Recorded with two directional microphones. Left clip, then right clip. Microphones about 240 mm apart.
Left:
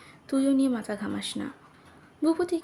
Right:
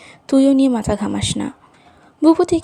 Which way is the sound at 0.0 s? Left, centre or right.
Right.